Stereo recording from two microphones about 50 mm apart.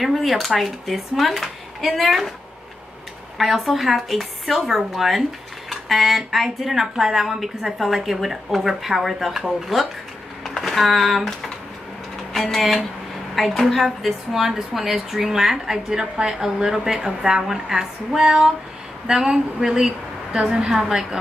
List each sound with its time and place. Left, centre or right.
0.0 s speech: centre
3.3 s speech: centre
10.6 s a woman's voice: centre